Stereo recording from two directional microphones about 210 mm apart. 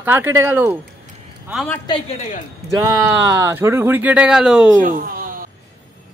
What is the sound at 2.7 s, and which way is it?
Speech, 15° right (ahead or behind).